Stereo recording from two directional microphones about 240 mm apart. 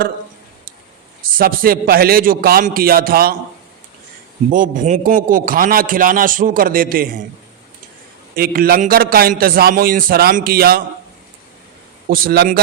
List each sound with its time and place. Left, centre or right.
1.2 s a man's voice: right
4.5 s a man's voice: right
8.4 s a man's voice: right
12.1 s a man's voice: right